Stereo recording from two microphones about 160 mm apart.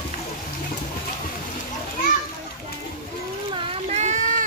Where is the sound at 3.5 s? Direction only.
35° right (ahead or behind); by 4.5 s 50° right (ahead or behind).